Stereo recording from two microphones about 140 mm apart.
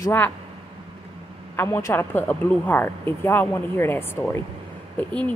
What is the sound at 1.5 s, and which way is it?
A woman's voice, 15° left (ahead or behind).